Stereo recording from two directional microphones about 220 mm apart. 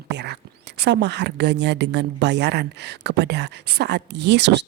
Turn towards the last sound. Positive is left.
turn(degrees=-50)  # may be behind; listen again after turning